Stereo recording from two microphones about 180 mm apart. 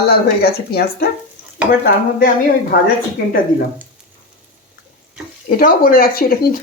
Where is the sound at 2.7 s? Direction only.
60° left (ahead or behind).